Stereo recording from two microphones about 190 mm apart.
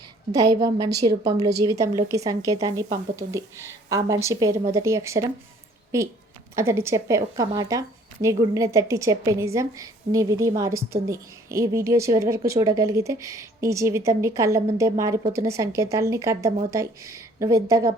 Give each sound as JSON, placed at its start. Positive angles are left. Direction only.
{"t": 0.3, "sound": "a woman's voice", "side_deg": -20}